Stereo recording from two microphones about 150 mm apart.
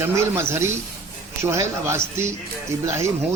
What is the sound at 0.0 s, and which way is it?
A man's voice, 20° right (ahead or behind).